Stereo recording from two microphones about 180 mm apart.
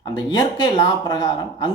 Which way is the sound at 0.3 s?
25° left (ahead or behind).